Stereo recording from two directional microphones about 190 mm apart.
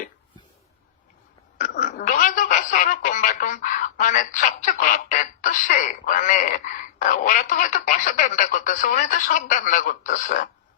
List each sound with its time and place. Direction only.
1.5 s a woman's voice: 45° left (ahead or behind)